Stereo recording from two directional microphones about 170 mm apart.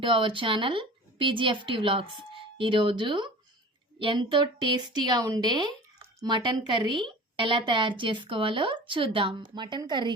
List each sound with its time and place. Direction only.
0.0 s a woman's voice: 30° right (ahead or behind)